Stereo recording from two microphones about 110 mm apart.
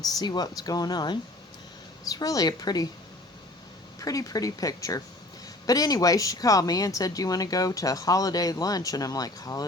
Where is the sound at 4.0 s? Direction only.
30° left (ahead or behind).